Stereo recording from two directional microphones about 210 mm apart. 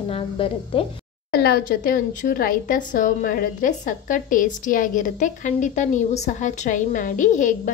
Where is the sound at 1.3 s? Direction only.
45° left (ahead or behind).